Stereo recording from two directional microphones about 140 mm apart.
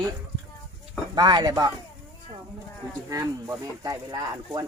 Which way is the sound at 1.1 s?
30° right (ahead or behind).